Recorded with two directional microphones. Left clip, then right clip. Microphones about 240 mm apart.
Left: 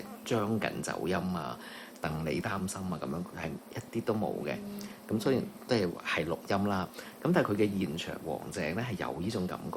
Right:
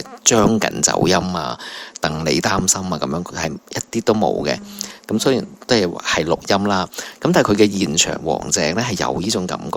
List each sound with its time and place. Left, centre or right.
0.3 s speech: right